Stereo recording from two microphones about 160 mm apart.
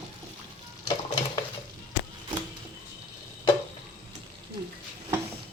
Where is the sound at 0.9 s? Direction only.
30° left (ahead or behind).